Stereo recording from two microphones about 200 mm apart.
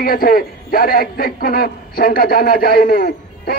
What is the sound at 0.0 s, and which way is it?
A man's voice, 50° left (ahead or behind).